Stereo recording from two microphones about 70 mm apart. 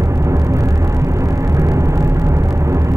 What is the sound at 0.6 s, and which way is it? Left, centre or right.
Vehicle, right.